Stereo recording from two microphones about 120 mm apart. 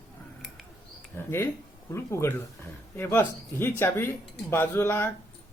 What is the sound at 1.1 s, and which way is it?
Speech, 20° left (ahead or behind).